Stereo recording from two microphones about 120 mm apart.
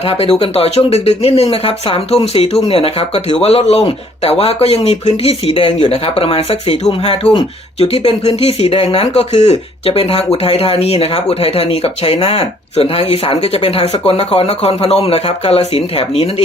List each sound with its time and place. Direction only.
0.1 s speech: 55° left (ahead or behind)
5.5 s speech: 50° left (ahead or behind)
7.8 s speech: 60° left (ahead or behind)